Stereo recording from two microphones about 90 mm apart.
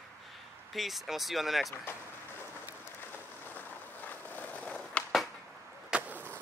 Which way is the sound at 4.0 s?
20° left (ahead or behind).